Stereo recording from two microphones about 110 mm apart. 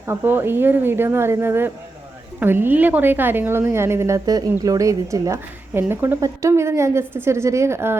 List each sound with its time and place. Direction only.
0.0 s a woman's voice: 20° right (ahead or behind)
5.7 s a woman's voice: 20° right (ahead or behind)